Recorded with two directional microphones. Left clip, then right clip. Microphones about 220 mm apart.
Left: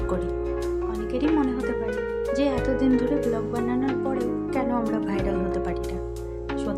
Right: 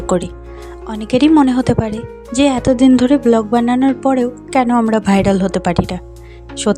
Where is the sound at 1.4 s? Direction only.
40° right (ahead or behind).